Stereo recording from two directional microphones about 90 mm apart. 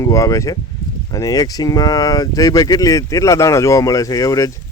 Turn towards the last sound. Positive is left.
turn(degrees=40)  # may be behind; listen again after turning